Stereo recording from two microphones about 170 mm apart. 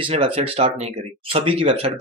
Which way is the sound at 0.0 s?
30° right (ahead or behind).